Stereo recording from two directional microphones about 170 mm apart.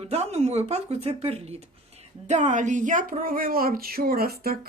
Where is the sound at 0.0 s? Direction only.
40° right (ahead or behind).